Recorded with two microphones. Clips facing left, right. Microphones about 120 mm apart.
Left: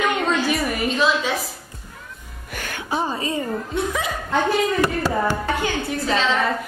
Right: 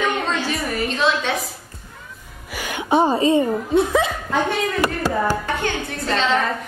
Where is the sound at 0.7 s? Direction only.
5° left (ahead or behind).